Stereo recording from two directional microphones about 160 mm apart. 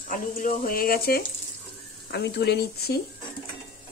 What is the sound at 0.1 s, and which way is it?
Speech, 55° left (ahead or behind).